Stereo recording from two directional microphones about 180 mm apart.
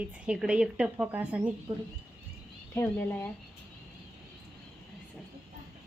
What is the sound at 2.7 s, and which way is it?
Speech, 10° left (ahead or behind).